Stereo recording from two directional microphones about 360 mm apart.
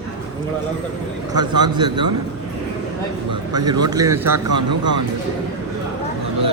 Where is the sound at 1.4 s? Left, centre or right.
Centre.